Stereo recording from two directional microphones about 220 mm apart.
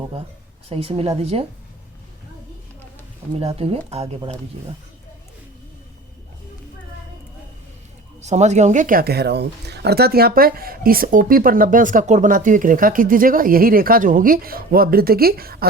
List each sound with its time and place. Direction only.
0.7 s speech: 25° right (ahead or behind)
3.3 s speech: 25° right (ahead or behind)
8.2 s speech: 30° right (ahead or behind)